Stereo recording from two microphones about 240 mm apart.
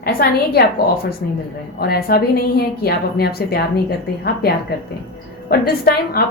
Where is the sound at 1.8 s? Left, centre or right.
Left.